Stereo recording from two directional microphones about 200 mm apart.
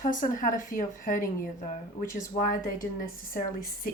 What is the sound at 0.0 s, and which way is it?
Speech, 40° left (ahead or behind).